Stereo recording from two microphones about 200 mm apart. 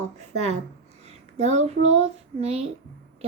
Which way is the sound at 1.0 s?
35° right (ahead or behind).